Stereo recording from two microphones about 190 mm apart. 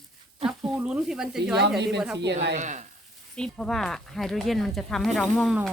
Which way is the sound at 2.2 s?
60° right (ahead or behind).